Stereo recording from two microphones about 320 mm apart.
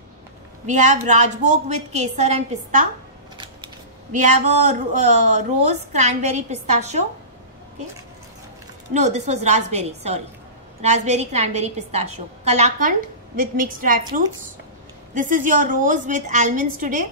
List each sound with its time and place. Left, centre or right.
0.7 s a woman's voice: right
8.9 s a woman's voice: right
15.1 s a woman's voice: right